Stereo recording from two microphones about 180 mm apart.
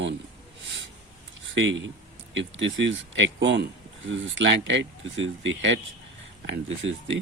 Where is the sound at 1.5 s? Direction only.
90° right.